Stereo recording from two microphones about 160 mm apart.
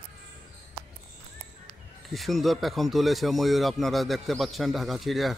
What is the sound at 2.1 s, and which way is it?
Speech, centre (ahead or behind).